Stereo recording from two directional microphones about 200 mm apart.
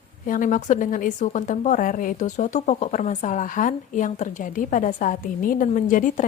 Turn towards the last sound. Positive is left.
turn(degrees=40)  # may be behind; listen again after turning